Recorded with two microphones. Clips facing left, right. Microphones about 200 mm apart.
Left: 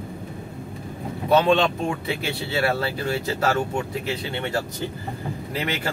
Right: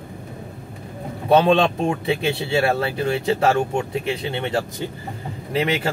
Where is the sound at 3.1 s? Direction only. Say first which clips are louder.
Right 5 dB; 25° right (ahead or behind).